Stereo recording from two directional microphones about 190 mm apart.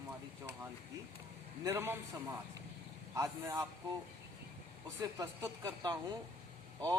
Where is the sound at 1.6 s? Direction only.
15° right (ahead or behind).